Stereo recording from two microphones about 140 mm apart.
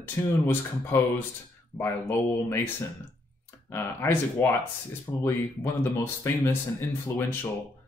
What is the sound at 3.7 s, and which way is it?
Speech, 20° left (ahead or behind).